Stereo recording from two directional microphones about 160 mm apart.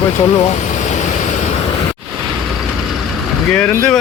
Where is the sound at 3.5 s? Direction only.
10° left (ahead or behind).